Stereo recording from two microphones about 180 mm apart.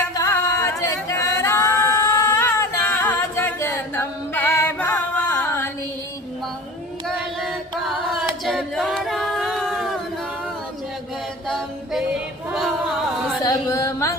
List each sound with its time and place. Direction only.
0.1 s singing: 15° left (ahead or behind)
3.1 s a capella: 15° left (ahead or behind)
7.4 s a capella: centre (ahead or behind)
11.4 s music: centre (ahead or behind)
12.5 s female singing: 5° right (ahead or behind)
13.4 s a sound: 20° left (ahead or behind)